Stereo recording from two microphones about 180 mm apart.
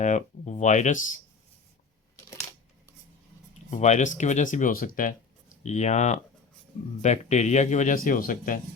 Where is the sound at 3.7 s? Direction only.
40° left (ahead or behind).